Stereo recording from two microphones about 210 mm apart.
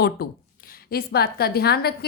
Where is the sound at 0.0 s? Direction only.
45° left (ahead or behind).